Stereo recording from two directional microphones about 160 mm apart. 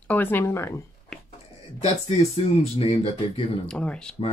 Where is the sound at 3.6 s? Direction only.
5° left (ahead or behind).